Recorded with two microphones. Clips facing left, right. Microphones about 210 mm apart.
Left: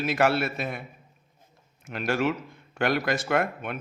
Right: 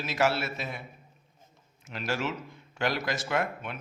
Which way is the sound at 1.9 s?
55° left (ahead or behind).